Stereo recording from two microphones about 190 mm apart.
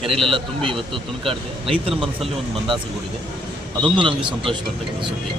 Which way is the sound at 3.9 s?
25° right (ahead or behind).